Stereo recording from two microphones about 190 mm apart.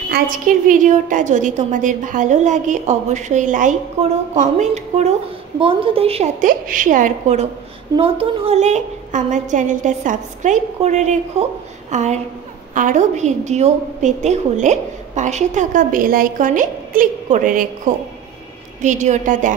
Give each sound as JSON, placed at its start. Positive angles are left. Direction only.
{"t": 0.1, "sound": "a woman's voice", "side_deg": -45}
{"t": 7.9, "sound": "a woman's voice", "side_deg": -30}